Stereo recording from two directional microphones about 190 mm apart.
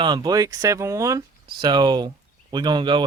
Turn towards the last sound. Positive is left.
turn(degrees=-25)  # may be behind; listen again after turning